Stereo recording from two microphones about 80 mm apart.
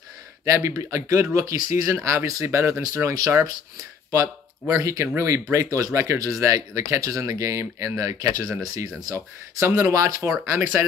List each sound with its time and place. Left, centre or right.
0.5 s speech: right
9.6 s speech: right